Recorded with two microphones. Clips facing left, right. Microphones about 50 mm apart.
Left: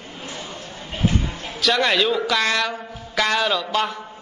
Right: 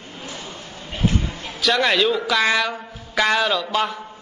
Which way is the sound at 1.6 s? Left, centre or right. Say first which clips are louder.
Right 1 dB; centre.